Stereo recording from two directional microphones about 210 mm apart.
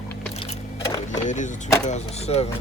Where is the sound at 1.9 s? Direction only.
30° left (ahead or behind).